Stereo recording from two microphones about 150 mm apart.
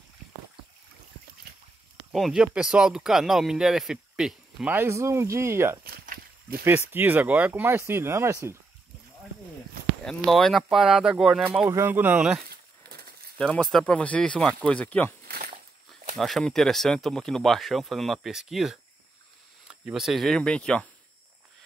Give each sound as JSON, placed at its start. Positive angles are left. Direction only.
{"t": 2.1, "sound": "speech", "side_deg": 0}
{"t": 5.9, "sound": "walk", "side_deg": -80}
{"t": 6.9, "sound": "speech", "side_deg": -15}
{"t": 10.0, "sound": "speech", "side_deg": 0}
{"t": 15.2, "sound": "a sound", "side_deg": -90}
{"t": 16.2, "sound": "speech", "side_deg": 0}